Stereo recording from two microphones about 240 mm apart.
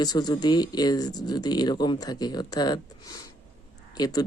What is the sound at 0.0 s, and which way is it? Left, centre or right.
Speech, centre.